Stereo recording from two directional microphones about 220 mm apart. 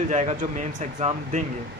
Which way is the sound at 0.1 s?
30° right (ahead or behind).